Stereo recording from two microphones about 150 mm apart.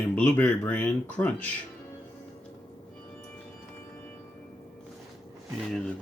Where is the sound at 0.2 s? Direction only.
10° left (ahead or behind).